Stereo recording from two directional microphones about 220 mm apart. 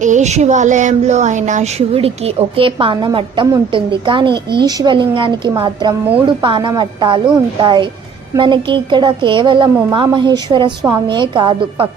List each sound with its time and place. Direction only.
0.0 s speech: 30° right (ahead or behind)